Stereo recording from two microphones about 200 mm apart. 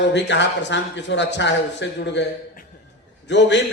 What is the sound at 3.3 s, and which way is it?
Speech, 60° left (ahead or behind).